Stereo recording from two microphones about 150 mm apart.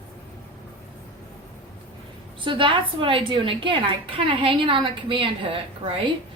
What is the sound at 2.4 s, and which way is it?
A woman's voice, 35° right (ahead or behind).